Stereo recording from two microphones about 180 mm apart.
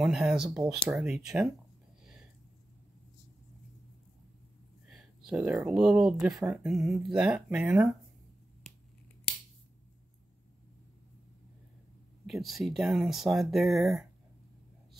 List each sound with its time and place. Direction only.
0.0 s speech: 5° right (ahead or behind)
4.8 s speech: centre (ahead or behind)
12.3 s speech: centre (ahead or behind)